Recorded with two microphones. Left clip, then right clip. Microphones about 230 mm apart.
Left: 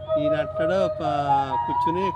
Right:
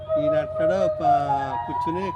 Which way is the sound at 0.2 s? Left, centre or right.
Centre.